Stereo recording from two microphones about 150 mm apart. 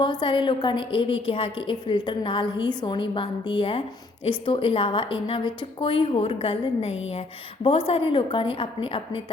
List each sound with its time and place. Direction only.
0.0 s a woman's voice: 30° left (ahead or behind)